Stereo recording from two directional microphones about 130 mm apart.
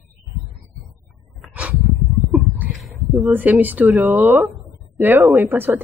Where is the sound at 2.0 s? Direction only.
Centre (ahead or behind).